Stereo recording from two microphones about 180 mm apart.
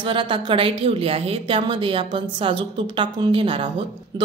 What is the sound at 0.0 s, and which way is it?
A woman's voice, 30° right (ahead or behind).